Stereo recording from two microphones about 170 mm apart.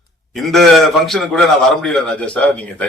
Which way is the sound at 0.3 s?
Centre (ahead or behind).